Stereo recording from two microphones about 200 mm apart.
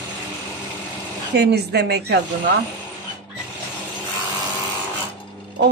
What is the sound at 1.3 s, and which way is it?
Speech, 55° right (ahead or behind).